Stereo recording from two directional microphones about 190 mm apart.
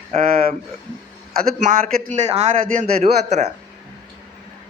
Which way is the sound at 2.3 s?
30° right (ahead or behind).